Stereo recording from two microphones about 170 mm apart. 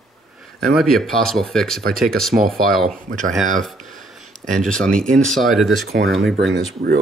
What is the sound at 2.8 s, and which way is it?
Speech, 50° right (ahead or behind).